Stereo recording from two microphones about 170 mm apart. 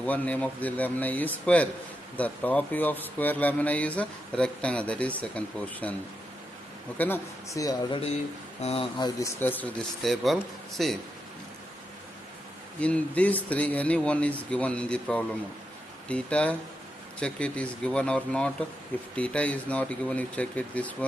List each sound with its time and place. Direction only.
0.0 s speech: 10° left (ahead or behind)
7.0 s a man's voice: 15° left (ahead or behind)
8.6 s a man's voice: 30° left (ahead or behind)
9.4 s speech: 10° left (ahead or behind)
12.8 s speech: 10° left (ahead or behind)